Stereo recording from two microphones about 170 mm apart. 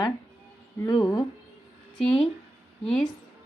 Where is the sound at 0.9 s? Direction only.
20° left (ahead or behind).